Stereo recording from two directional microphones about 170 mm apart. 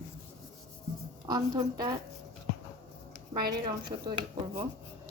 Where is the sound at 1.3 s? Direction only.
20° right (ahead or behind).